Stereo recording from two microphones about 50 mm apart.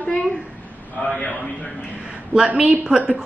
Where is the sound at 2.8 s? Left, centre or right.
Centre.